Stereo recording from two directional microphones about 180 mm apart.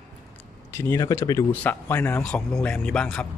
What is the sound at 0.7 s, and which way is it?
Speech, 15° left (ahead or behind).